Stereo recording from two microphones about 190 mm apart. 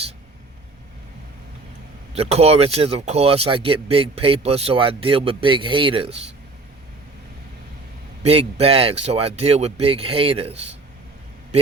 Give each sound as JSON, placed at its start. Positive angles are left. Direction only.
{"t": 2.1, "sound": "speech", "side_deg": -35}
{"t": 8.2, "sound": "speech", "side_deg": -35}